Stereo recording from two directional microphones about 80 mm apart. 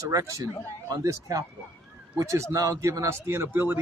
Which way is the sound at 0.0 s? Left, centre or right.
Right.